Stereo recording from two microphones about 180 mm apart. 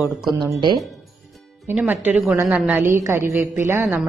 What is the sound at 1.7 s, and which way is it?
A woman's voice, 10° right (ahead or behind).